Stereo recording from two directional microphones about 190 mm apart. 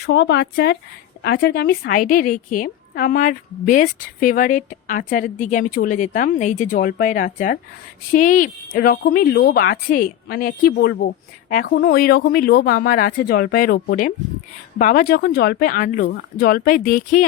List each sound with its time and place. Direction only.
0.0 s a woman's voice: 65° left (ahead or behind); by 17.2 s 45° left (ahead or behind)